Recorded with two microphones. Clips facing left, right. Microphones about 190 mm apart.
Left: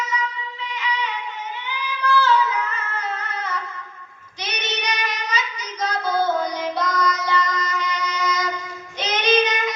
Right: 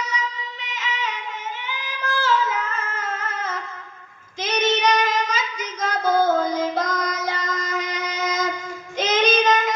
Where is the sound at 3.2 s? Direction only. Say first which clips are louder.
Even; 45° right (ahead or behind).